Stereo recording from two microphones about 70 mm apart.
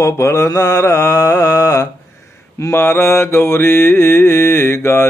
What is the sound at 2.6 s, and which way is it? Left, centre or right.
Mantra, left.